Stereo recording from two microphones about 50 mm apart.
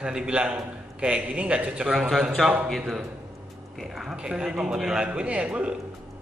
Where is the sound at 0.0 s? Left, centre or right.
Centre.